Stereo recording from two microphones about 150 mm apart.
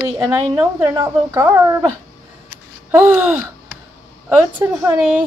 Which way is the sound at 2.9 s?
15° right (ahead or behind).